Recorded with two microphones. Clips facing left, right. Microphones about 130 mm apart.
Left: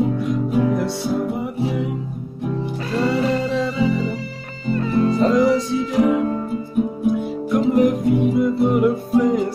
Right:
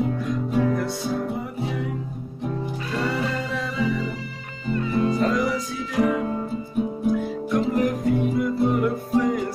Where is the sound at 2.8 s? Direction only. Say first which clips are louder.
Left 7 dB; 35° left (ahead or behind).